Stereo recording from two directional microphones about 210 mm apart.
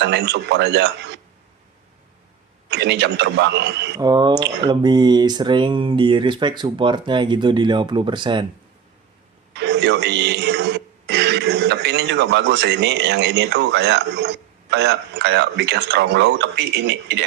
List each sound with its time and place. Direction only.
0.0 s a man's voice: 55° right (ahead or behind)
2.6 s a man's voice: 55° right (ahead or behind)
3.9 s speech: 20° right (ahead or behind)
9.5 s speech: 55° right (ahead or behind)